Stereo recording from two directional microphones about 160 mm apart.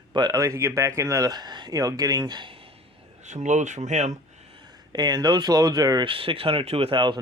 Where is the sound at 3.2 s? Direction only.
45° right (ahead or behind).